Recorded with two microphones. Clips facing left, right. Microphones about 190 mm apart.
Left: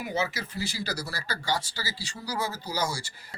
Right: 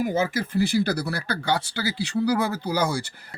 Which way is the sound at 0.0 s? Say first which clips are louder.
Right 7 dB; 50° right (ahead or behind).